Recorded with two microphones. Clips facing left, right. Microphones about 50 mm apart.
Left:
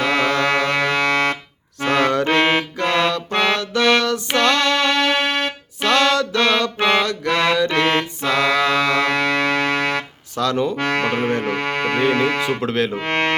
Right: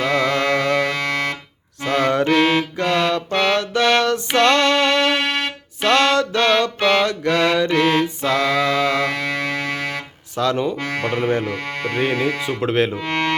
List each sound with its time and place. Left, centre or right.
0.0 s music: left
3.5 s music: right
5.1 s music: centre
5.8 s mantra: right
6.7 s mantra: left
7.0 s mantra: right
7.7 s music: left
10.3 s music: right
10.8 s music: left
12.6 s speech: right
13.0 s music: left